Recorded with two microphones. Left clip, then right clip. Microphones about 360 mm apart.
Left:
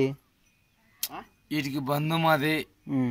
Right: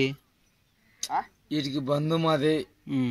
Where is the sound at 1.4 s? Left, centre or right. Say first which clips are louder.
Right 1 dB; centre.